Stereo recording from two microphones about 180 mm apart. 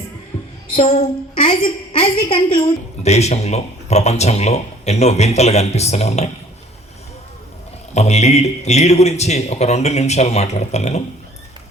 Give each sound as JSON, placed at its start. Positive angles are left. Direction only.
{"t": 0.3, "sound": "music", "side_deg": 10}
{"t": 0.8, "sound": "a woman's voice", "side_deg": 30}
{"t": 7.9, "sound": "a woman's voice", "side_deg": 40}